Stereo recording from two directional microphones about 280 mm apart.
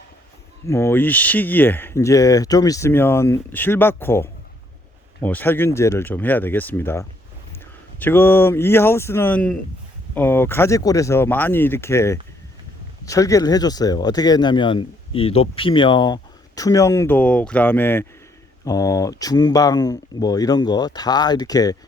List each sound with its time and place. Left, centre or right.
0.7 s speech: centre